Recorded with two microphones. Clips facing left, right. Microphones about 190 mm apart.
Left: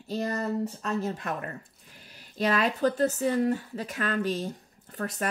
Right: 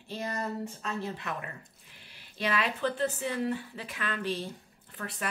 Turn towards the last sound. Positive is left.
turn(degrees=40)  # may be behind; listen again after turning